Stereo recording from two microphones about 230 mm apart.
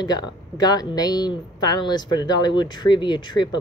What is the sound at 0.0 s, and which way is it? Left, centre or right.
Speech, centre.